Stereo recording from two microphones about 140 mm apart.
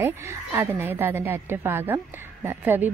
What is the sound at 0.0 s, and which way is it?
A woman's voice, 15° right (ahead or behind).